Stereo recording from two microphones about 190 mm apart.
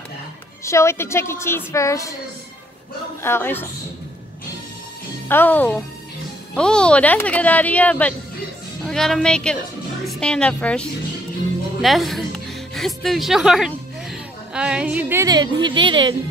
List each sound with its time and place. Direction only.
0.7 s speech: 15° left (ahead or behind)
3.2 s speech: 10° left (ahead or behind)
5.3 s a woman's voice: 10° left (ahead or behind); by 16.2 s 25° right (ahead or behind)